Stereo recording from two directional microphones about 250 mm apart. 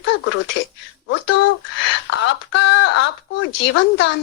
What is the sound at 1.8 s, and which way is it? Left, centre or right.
Speech, left.